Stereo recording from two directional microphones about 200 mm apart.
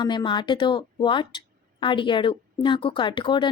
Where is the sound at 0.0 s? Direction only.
20° left (ahead or behind).